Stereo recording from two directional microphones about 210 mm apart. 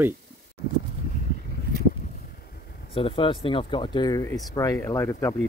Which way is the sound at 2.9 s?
25° left (ahead or behind).